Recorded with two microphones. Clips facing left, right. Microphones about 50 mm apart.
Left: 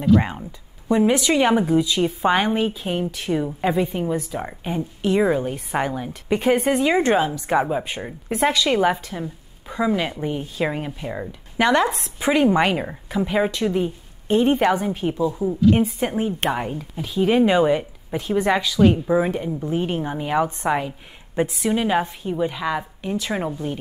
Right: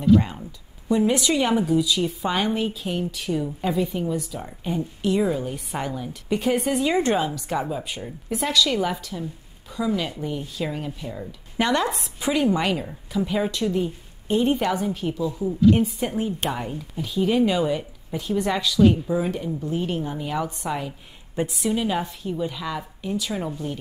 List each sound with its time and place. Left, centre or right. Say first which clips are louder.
0.0 s a woman's voice: even; left
18.8 s a woman's voice: even; left